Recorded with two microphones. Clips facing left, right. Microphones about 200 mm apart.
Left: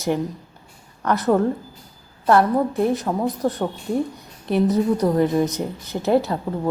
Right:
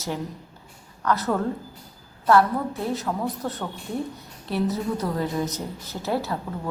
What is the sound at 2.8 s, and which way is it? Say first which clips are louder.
Speech: left 7 dB; 15° left (ahead or behind).